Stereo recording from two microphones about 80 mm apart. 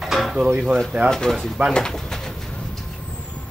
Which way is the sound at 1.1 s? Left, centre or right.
Centre.